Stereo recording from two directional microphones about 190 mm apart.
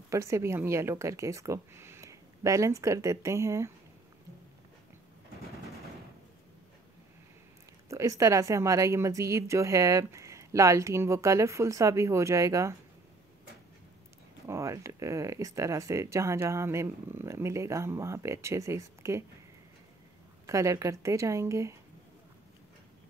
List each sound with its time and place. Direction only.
0.1 s a woman's voice: 15° right (ahead or behind)
7.9 s a woman's voice: 15° right (ahead or behind)
14.5 s a woman's voice: 15° right (ahead or behind)
20.4 s a woman's voice: 15° right (ahead or behind)